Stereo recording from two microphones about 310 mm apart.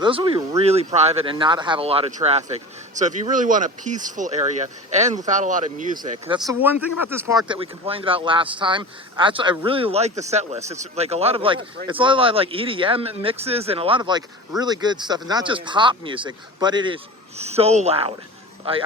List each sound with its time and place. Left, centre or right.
0.0 s speech: centre
6.5 s speech: centre
6.7 s speech: left
7.1 s speech: centre